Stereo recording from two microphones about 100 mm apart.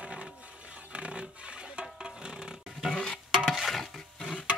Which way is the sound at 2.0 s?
10° right (ahead or behind).